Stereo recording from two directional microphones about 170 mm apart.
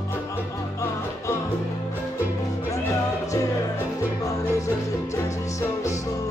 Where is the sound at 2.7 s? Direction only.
20° left (ahead or behind).